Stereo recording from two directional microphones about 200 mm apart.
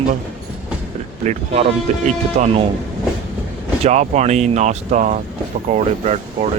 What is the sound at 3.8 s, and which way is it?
Speech, 35° right (ahead or behind).